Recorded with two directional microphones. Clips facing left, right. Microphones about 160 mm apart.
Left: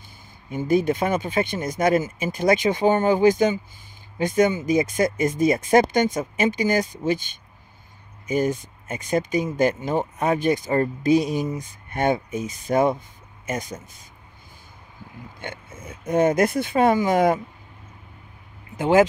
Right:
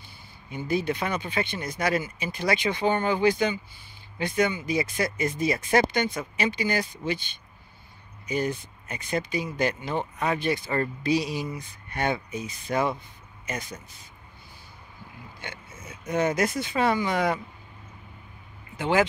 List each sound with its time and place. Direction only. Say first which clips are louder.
0.5 s speech: left 7 dB; 45° left (ahead or behind)
15.4 s oink: left 6 dB; 50° left (ahead or behind)
16.1 s speech: left 6 dB; 50° left (ahead or behind)
18.8 s speech: left 6 dB; 45° left (ahead or behind)